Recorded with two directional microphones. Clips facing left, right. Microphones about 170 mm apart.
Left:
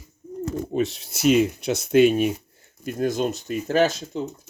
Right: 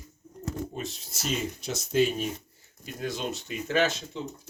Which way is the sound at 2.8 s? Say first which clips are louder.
Left 9 dB; 45° left (ahead or behind).